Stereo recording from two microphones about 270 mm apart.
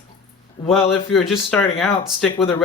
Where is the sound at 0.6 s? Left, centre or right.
Centre.